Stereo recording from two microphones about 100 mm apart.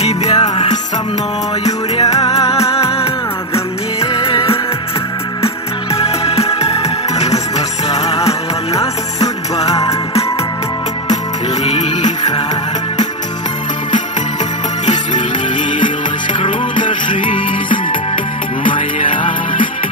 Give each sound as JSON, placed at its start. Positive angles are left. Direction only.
{"t": 0.0, "sound": "jingle bell", "side_deg": 90}
{"t": 1.6, "sound": "music", "side_deg": 90}
{"t": 5.9, "sound": "music", "side_deg": 90}
{"t": 9.7, "sound": "music", "side_deg": 35}
{"t": 11.6, "sound": "music", "side_deg": 90}
{"t": 16.3, "sound": "music", "side_deg": 55}